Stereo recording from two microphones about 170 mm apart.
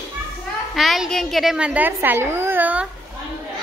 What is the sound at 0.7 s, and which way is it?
A woman's voice, centre (ahead or behind).